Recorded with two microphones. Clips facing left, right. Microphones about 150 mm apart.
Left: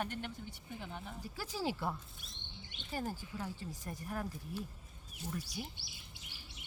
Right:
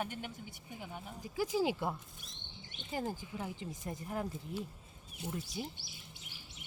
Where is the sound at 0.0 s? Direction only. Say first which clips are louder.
Even; 10° right (ahead or behind).